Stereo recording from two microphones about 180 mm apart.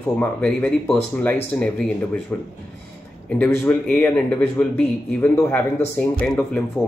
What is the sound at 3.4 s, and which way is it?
Speech, 10° left (ahead or behind).